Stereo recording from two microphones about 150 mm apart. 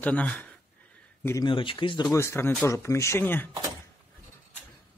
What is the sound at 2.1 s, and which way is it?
Speech, 20° left (ahead or behind).